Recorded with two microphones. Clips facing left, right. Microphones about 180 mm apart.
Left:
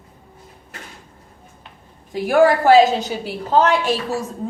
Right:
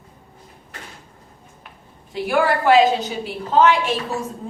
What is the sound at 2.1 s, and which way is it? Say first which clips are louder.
A woman's voice: left 5 dB; 45° left (ahead or behind).